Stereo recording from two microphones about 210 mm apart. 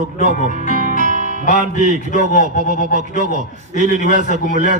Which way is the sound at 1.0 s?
35° right (ahead or behind).